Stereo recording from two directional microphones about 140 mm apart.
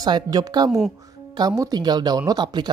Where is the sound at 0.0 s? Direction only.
25° right (ahead or behind).